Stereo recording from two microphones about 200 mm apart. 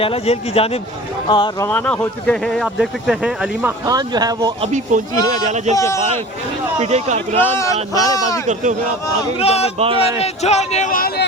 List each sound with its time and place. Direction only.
0.0 s speech: 30° left (ahead or behind)
1.6 s speech: 5° left (ahead or behind); by 4.7 s 20° right (ahead or behind)
4.7 s speech: 40° right (ahead or behind)
5.7 s speech: 15° left (ahead or behind)
6.7 s speech: 35° right (ahead or behind)
7.3 s speech: 15° left (ahead or behind)
8.4 s speech: 40° right (ahead or behind)
9.4 s a man's voice: 30° left (ahead or behind)
9.7 s speech: 30° right (ahead or behind)
10.0 s a man's voice: 30° left (ahead or behind)